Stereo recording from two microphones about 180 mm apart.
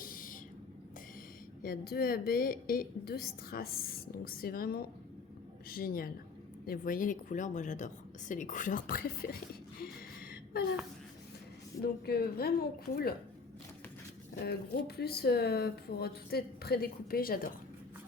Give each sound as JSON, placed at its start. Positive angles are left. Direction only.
{"t": 0.0, "sound": "a sound", "side_deg": 50}
{"t": 1.6, "sound": "a woman's voice", "side_deg": 60}
{"t": 9.8, "sound": "gasp", "side_deg": 55}
{"t": 12.0, "sound": "a woman's voice", "side_deg": 60}
{"t": 14.4, "sound": "a woman's voice", "side_deg": 60}